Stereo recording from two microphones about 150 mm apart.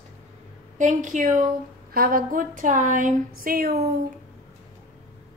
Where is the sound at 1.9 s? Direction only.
75° right (ahead or behind).